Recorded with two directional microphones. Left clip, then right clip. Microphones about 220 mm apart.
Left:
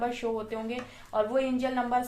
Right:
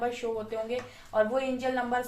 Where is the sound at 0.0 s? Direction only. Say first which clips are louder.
Left 1 dB; 40° left (ahead or behind).